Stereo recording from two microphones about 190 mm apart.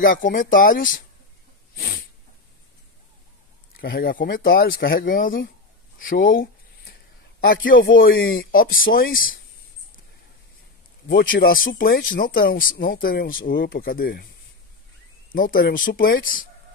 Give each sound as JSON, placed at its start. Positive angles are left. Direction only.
{"t": 0.0, "sound": "speech", "side_deg": 50}
{"t": 1.8, "sound": "dog", "side_deg": 50}
{"t": 3.7, "sound": "speech", "side_deg": 50}
{"t": 11.2, "sound": "speech", "side_deg": 50}
{"t": 15.3, "sound": "speech", "side_deg": 50}